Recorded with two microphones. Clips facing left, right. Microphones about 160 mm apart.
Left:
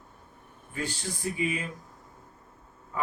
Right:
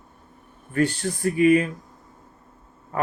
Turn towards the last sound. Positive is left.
turn(degrees=-60)  # may be behind; listen again after turning